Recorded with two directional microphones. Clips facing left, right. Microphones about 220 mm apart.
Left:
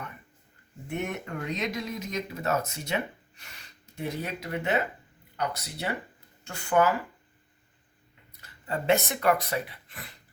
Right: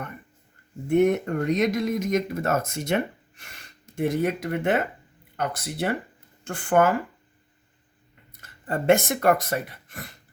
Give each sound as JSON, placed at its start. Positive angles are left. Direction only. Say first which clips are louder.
{"t": 0.9, "sound": "speech", "louder": "right 13 dB", "side_deg": -50}
{"t": 8.3, "sound": "speech", "louder": "right 4 dB", "side_deg": -50}